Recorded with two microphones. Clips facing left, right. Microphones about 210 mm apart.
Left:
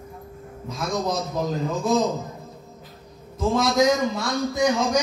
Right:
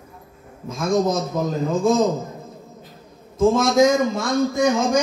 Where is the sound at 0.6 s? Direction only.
50° right (ahead or behind).